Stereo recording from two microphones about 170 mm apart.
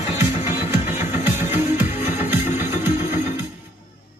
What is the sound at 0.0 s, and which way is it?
Music, 15° right (ahead or behind).